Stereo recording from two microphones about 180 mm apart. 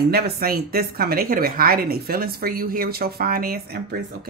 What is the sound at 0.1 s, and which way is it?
Speech, 60° right (ahead or behind).